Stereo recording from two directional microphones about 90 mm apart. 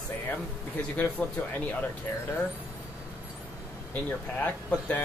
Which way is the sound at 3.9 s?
20° left (ahead or behind).